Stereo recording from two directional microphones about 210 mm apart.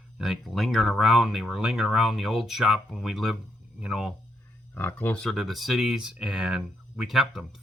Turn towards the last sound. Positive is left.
turn(degrees=0)  # may be behind; listen again after turning